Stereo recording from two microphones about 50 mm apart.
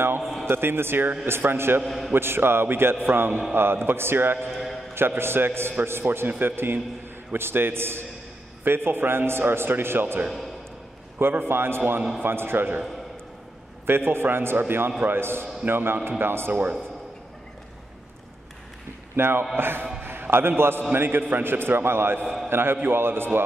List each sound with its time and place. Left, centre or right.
0.2 s a sound: centre
0.5 s a man's voice: right
1.9 s a man's voice: centre
2.1 s a man's voice: right
4.5 s a sound: centre
4.9 s a man's voice: right
6.0 s a man's voice: right
13.8 s a man's voice: right
19.1 s a man's voice: right
20.0 s a sound: right
20.9 s a man's voice: right
22.2 s a man's voice: centre
22.5 s a man's voice: right